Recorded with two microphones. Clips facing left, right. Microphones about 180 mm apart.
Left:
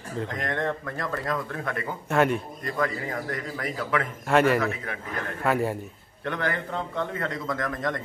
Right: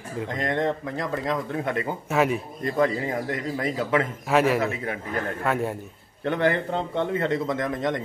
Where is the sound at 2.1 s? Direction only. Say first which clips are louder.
Left 1 dB; 5° right (ahead or behind).